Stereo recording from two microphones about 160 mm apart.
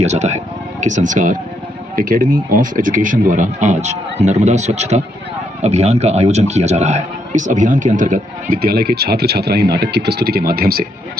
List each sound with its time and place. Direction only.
0.0 s a man's voice: 45° right (ahead or behind); by 10.8 s 70° right (ahead or behind)